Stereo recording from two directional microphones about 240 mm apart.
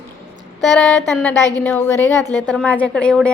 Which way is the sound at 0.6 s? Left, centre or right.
Centre.